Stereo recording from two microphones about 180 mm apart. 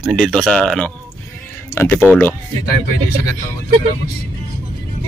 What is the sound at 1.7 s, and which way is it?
Speech, 15° left (ahead or behind).